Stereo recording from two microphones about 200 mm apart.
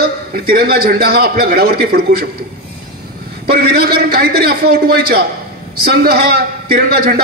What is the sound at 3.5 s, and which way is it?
A man's voice, 55° right (ahead or behind).